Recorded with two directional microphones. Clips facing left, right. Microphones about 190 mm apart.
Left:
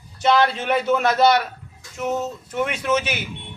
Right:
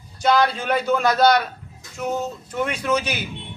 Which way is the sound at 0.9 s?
5° left (ahead or behind).